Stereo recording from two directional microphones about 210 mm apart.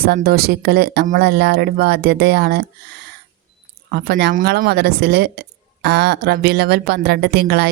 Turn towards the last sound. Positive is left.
turn(degrees=-50)  # may be behind; listen again after turning